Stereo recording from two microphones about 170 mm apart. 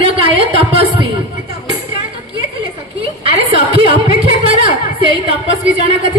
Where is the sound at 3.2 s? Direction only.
35° right (ahead or behind).